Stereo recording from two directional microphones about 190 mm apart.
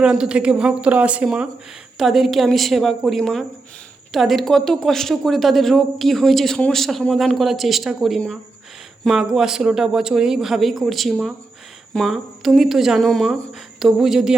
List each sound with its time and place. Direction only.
0.0 s speech: 5° right (ahead or behind)